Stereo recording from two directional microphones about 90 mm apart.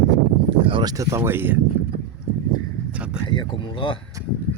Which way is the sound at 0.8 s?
40° right (ahead or behind).